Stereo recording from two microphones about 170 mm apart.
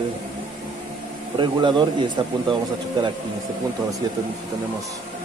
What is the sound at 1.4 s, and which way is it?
Speech, 25° right (ahead or behind).